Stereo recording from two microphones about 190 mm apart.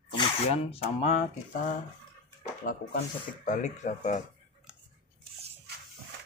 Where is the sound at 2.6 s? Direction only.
50° left (ahead or behind).